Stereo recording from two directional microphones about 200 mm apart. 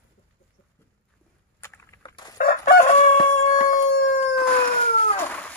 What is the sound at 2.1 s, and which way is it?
Chicken, 20° left (ahead or behind).